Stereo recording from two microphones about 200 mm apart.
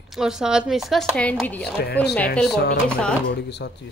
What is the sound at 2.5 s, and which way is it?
A woman's voice, 55° left (ahead or behind).